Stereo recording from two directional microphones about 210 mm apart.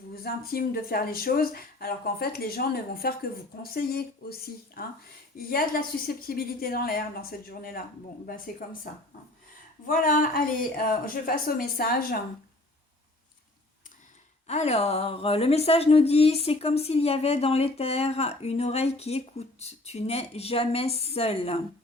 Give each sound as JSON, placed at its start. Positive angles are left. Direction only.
{"t": 0.1, "sound": "speech", "side_deg": 45}
{"t": 9.8, "sound": "speech", "side_deg": 40}
{"t": 14.4, "sound": "speech", "side_deg": 30}